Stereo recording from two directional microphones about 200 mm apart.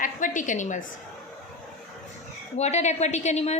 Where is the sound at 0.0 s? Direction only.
40° left (ahead or behind).